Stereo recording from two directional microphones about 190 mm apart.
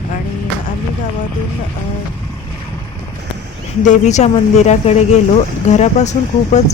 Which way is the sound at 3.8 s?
40° left (ahead or behind).